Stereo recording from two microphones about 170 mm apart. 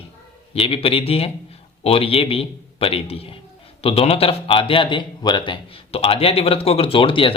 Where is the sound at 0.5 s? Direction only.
35° left (ahead or behind).